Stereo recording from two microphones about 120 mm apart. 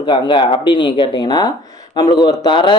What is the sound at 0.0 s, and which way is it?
Speech, 40° left (ahead or behind).